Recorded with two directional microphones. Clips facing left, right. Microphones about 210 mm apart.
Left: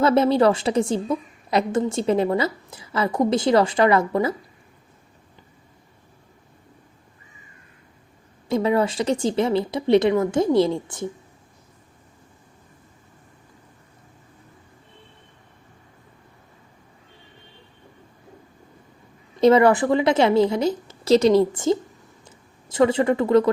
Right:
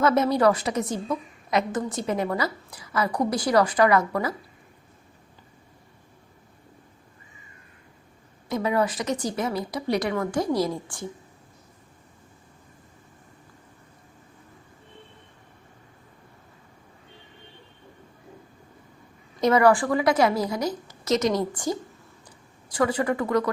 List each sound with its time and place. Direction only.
0.0 s a woman's voice: 30° left (ahead or behind)
8.4 s a woman's voice: 30° left (ahead or behind)
19.4 s a woman's voice: 25° left (ahead or behind)